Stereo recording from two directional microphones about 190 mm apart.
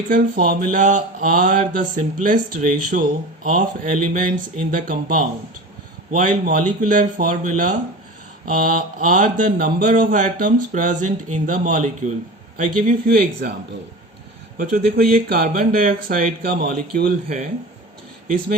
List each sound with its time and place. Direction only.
0.1 s speech: 45° right (ahead or behind)
14.6 s speech: 50° right (ahead or behind)